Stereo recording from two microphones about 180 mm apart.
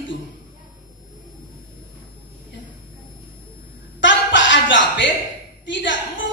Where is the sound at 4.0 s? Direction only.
90° left.